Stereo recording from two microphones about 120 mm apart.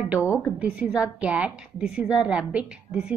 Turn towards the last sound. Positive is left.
turn(degrees=-5)  # may be behind; listen again after turning